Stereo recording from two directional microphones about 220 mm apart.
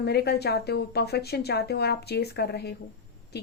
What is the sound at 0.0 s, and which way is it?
A woman's voice, 45° left (ahead or behind).